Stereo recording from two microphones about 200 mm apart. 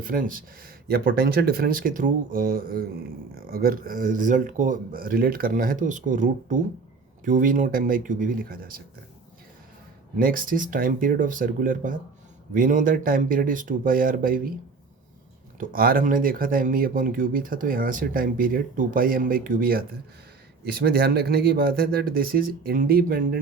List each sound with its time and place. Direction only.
0.0 s speech: 45° right (ahead or behind)
10.2 s speech: 45° right (ahead or behind)
15.5 s speech: 45° right (ahead or behind)
21.0 s speech: 50° right (ahead or behind)